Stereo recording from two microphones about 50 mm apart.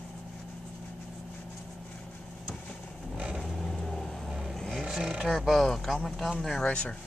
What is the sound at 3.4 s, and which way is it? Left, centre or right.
Vehicle, centre.